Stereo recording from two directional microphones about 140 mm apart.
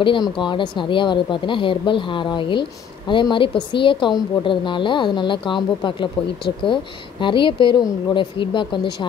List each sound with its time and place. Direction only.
0.0 s speech: 35° left (ahead or behind)